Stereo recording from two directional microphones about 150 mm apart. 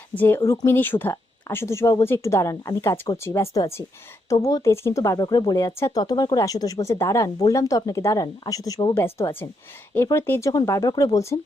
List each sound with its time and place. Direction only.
0.1 s speech: 15° left (ahead or behind)